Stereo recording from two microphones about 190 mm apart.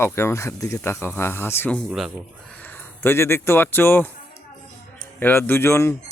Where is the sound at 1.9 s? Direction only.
Centre (ahead or behind).